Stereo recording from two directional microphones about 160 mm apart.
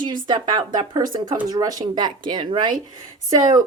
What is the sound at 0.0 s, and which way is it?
Speech, 30° right (ahead or behind).